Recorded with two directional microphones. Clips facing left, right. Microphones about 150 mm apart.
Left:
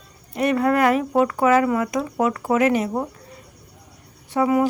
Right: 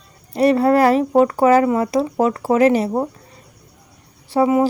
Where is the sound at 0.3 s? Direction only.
35° right (ahead or behind).